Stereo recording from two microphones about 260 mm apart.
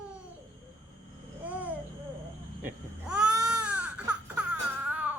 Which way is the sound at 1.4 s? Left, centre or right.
Centre.